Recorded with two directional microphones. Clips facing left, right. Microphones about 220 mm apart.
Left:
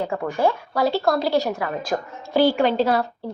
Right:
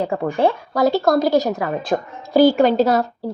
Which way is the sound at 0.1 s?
35° right (ahead or behind).